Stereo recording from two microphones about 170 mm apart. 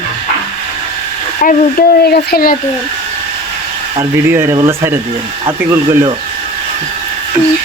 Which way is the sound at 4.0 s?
15° right (ahead or behind).